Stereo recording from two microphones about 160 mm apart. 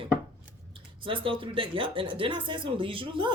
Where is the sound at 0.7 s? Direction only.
35° right (ahead or behind).